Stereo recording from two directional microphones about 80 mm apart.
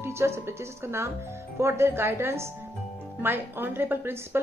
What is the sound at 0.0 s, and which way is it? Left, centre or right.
Speech, right.